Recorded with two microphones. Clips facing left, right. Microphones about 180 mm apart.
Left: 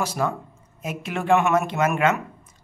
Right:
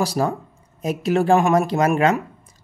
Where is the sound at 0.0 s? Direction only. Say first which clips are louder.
Right 4 dB; 35° right (ahead or behind).